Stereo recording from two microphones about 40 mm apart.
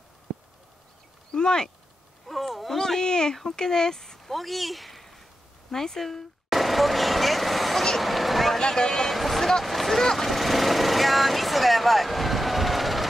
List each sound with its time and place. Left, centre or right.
1.3 s speech: centre
2.2 s speech: centre
2.8 s a sound: centre
3.4 s speech: centre
6.5 s vehicle: centre
8.5 s speech: centre
9.1 s speech: centre
9.5 s vehicle: centre